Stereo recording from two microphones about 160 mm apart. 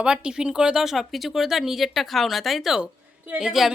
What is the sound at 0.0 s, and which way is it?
Speech, 5° right (ahead or behind).